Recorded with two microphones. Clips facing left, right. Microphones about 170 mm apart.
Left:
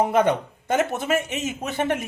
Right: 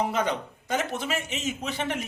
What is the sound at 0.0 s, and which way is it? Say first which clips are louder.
Speech: left 7 dB; 55° left (ahead or behind).